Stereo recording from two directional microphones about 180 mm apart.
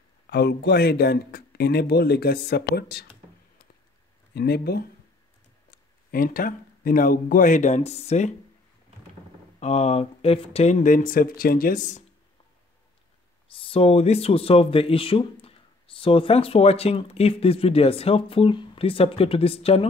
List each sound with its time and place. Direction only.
0.3 s speech: 60° left (ahead or behind)
4.3 s speech: 60° left (ahead or behind); by 8.3 s 35° left (ahead or behind)
9.6 s speech: 40° left (ahead or behind)
13.5 s speech: 30° left (ahead or behind)